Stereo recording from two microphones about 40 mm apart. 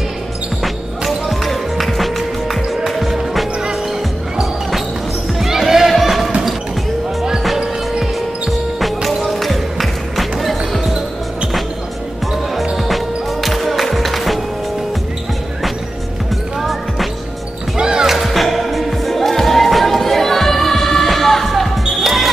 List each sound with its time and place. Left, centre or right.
1.0 s music: centre
4.4 s basketball bounce: centre
5.5 s a sound: centre
8.0 s basketball bounce: centre
12.7 s music: centre
17.7 s music: centre
18.2 s music: centre